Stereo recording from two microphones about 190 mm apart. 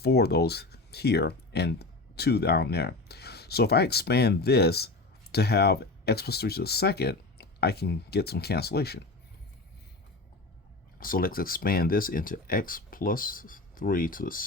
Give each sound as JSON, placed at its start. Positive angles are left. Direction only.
{"t": 0.0, "sound": "speech", "side_deg": 60}
{"t": 11.0, "sound": "speech", "side_deg": 50}